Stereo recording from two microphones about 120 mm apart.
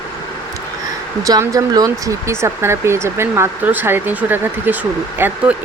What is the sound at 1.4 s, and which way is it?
Speech, 25° right (ahead or behind).